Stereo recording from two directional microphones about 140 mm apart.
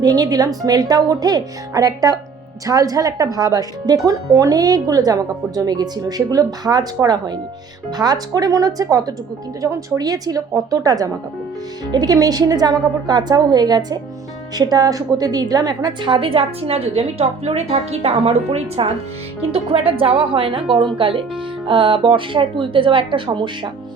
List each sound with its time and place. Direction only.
0.0 s a woman's voice: 25° right (ahead or behind)